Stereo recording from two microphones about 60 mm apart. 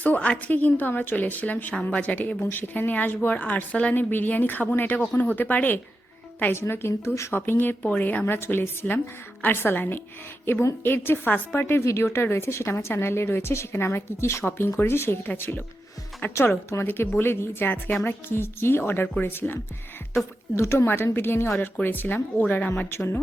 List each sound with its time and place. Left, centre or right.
0.0 s a woman's voice: left
1.7 s a woman's voice: centre
6.5 s a woman's voice: left
7.3 s a woman's voice: left
11.8 s a woman's voice: left
20.6 s a woman's voice: left
22.9 s a woman's voice: left